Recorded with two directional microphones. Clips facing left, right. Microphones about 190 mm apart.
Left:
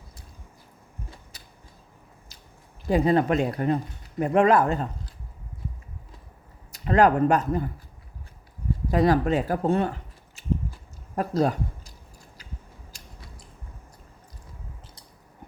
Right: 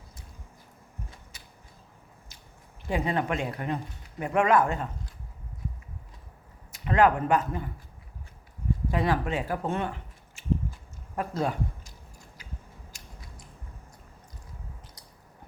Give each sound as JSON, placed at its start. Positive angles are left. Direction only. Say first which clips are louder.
{"t": 1.3, "sound": "a sound", "louder": "left 1 dB", "side_deg": 35}
{"t": 2.8, "sound": "speech", "louder": "left 7 dB", "side_deg": 35}
{"t": 6.7, "sound": "speech", "louder": "left 3 dB", "side_deg": 35}
{"t": 8.9, "sound": "speech", "louder": "left 7 dB", "side_deg": 40}
{"t": 11.1, "sound": "a sound", "louder": "left 6 dB", "side_deg": 35}
{"t": 12.9, "sound": "scissors", "louder": "left 2 dB", "side_deg": 35}